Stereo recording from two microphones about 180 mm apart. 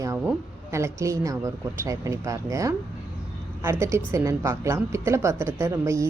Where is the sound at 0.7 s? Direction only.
15° right (ahead or behind).